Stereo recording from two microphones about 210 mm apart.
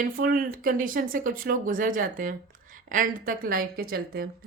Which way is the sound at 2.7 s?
40° right (ahead or behind).